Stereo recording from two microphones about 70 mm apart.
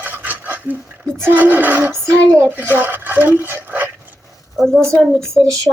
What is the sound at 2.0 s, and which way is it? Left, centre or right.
Speech, right.